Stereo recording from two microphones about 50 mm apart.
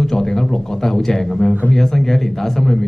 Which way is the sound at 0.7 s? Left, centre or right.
Centre.